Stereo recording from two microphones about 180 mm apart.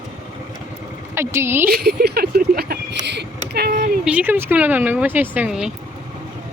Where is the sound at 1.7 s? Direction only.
60° right (ahead or behind).